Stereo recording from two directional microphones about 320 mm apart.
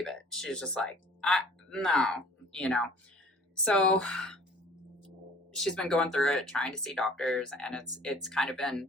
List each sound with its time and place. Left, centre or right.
0.0 s speech: centre
5.5 s speech: centre